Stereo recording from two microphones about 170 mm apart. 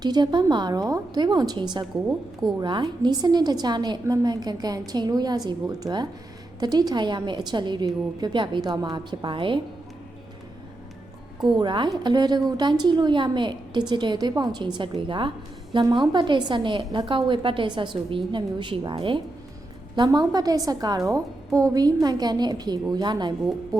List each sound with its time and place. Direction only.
0.0 s a woman's voice: 25° right (ahead or behind)
11.4 s a woman's voice: 25° right (ahead or behind)